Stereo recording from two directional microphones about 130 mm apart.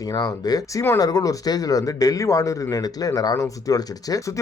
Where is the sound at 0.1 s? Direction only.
30° left (ahead or behind).